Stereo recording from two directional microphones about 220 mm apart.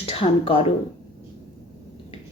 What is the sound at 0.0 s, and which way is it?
Speech, 25° left (ahead or behind).